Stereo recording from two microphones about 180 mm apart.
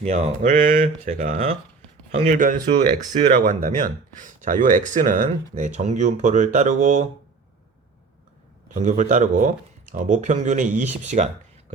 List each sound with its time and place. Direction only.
0.0 s speech: 35° right (ahead or behind)
8.7 s speech: 45° right (ahead or behind)